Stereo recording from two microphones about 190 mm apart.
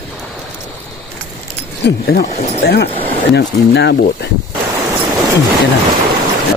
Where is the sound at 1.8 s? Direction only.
65° left (ahead or behind).